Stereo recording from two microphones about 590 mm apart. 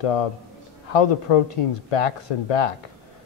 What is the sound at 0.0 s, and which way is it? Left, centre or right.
Speech, left.